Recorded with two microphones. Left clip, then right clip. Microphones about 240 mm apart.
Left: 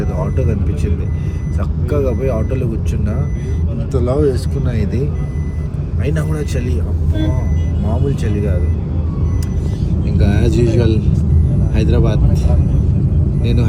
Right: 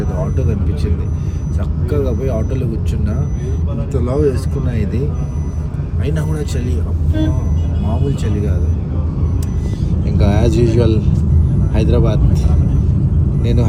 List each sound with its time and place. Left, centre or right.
1.9 s speech: centre
4.0 s speech: left
8.0 s speech: centre
9.9 s speech: centre